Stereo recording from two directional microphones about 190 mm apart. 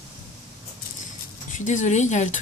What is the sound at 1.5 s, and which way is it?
Speech, 40° left (ahead or behind).